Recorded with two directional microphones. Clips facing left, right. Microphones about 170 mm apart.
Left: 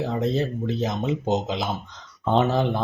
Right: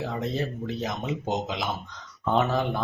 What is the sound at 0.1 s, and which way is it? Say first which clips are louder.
Speech: left 5 dB; 30° left (ahead or behind).